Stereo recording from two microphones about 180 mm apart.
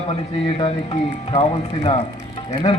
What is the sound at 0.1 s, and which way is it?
A man's voice, 30° left (ahead or behind).